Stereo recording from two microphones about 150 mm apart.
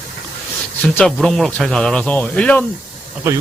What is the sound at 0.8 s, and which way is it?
Speech, 10° left (ahead or behind).